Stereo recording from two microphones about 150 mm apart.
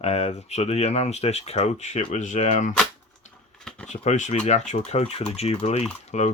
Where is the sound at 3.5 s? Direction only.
5° left (ahead or behind).